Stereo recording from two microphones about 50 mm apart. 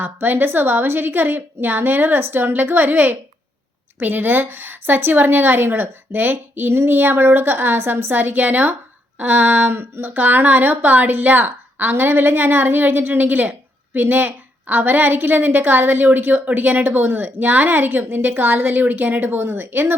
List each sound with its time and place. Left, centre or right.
0.0 s a woman's voice: right